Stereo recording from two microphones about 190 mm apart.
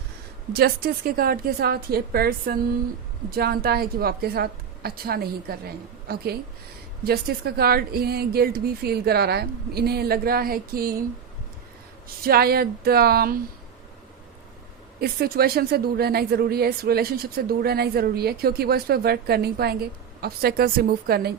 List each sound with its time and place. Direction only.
0.5 s a woman's voice: 55° right (ahead or behind)
12.0 s a woman's voice: 50° right (ahead or behind)
15.0 s speech: 55° right (ahead or behind)